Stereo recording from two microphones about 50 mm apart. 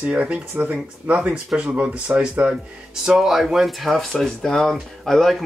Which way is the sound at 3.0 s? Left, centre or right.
Centre.